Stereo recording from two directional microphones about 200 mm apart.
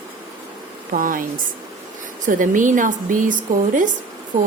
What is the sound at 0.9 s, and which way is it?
A woman's voice, 45° right (ahead or behind).